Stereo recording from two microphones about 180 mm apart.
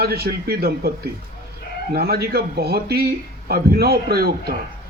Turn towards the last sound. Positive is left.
turn(degrees=-60)  # may be behind; listen again after turning